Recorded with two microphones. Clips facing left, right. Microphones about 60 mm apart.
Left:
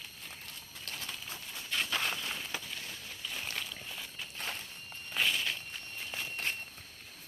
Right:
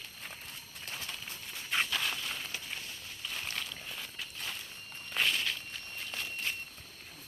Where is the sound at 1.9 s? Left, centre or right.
Left.